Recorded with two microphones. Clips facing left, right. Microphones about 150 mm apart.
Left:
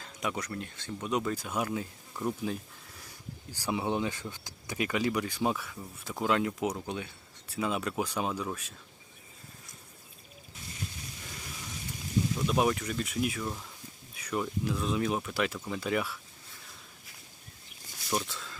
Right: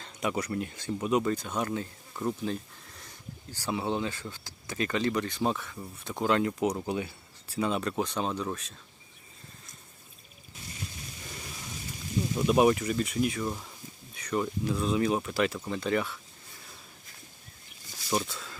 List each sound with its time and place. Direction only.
0.0 s speech: centre (ahead or behind)
12.5 s speech: 5° right (ahead or behind)
13.4 s speech: 10° right (ahead or behind)
14.2 s a sound: 5° left (ahead or behind)
14.6 s speech: centre (ahead or behind)
18.1 s speech: centre (ahead or behind)